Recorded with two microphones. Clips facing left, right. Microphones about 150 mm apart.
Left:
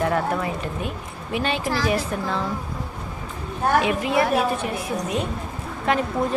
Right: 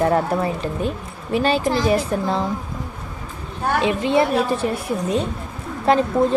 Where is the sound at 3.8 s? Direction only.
25° right (ahead or behind).